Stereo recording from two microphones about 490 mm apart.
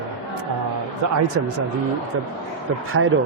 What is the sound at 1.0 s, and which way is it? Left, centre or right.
Speech, right.